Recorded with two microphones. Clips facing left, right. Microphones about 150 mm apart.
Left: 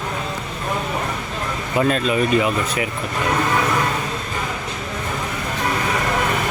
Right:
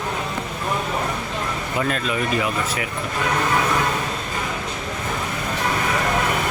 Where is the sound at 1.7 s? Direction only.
25° left (ahead or behind).